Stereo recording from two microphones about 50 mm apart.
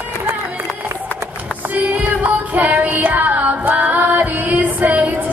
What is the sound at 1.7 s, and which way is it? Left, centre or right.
Music, right.